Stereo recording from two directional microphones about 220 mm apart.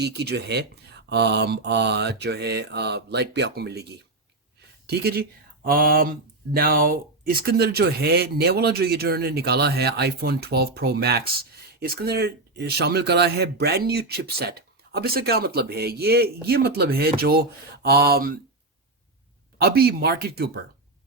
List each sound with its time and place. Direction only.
0.0 s speech: 50° right (ahead or behind)
19.5 s speech: 45° right (ahead or behind)